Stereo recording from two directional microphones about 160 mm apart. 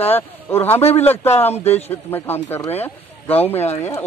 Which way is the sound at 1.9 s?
15° left (ahead or behind).